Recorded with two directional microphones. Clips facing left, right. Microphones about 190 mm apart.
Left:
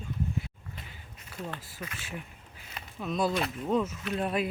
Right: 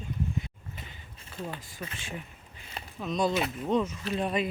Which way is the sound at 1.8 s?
30° right (ahead or behind).